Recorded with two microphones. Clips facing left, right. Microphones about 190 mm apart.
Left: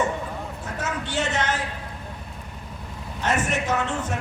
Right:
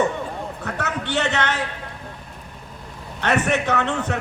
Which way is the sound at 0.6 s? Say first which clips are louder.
Right 3 dB; 65° right (ahead or behind).